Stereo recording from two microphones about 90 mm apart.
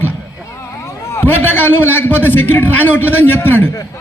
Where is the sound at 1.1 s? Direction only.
25° left (ahead or behind).